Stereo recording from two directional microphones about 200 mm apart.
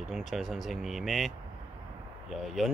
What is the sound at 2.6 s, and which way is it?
Speech, centre (ahead or behind).